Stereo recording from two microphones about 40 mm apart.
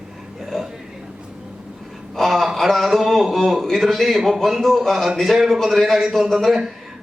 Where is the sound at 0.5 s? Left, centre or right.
Centre.